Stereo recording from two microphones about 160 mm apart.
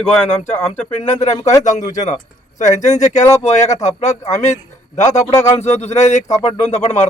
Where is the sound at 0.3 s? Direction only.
45° left (ahead or behind).